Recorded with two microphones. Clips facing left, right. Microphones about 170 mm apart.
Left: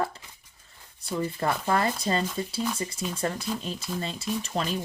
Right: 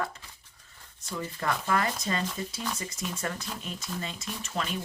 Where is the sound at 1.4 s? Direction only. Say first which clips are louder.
Left 2 dB; 30° left (ahead or behind).